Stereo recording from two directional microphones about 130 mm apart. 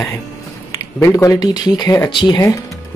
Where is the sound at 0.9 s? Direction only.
20° left (ahead or behind).